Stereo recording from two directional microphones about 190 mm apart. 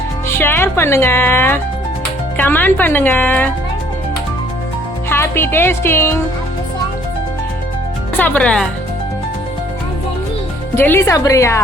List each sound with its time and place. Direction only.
0.3 s speech: 10° left (ahead or behind)
5.0 s speech: 10° left (ahead or behind)
8.2 s speech: 10° left (ahead or behind)
10.8 s speech: 10° left (ahead or behind)